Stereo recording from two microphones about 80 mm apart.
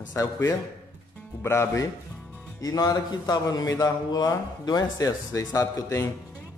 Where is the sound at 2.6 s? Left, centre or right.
Left.